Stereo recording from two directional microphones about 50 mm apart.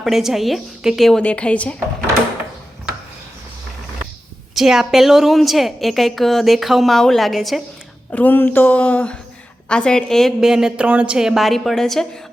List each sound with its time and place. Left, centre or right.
0.0 s a woman's voice: centre
0.8 s speech: centre
1.2 s a woman's voice: left
4.5 s a woman's voice: centre
8.1 s a woman's voice: left; by 10.3 s centre
10.4 s speech: centre
10.8 s a woman's voice: right
11.2 s speech: centre
11.4 s a woman's voice: centre